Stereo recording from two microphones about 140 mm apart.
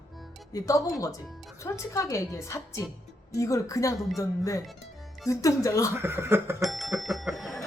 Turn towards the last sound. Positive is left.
turn(degrees=0)  # may be behind; listen again after turning